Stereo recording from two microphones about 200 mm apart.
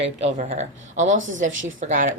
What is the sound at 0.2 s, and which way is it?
Speech, 35° right (ahead or behind).